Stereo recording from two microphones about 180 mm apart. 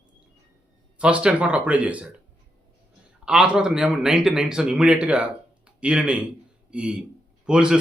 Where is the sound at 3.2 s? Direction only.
5° right (ahead or behind).